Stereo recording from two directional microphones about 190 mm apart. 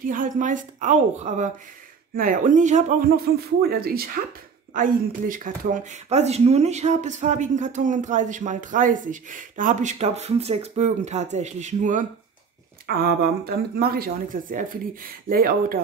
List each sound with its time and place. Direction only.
0.0 s speech: 45° right (ahead or behind)
12.8 s speech: 55° right (ahead or behind)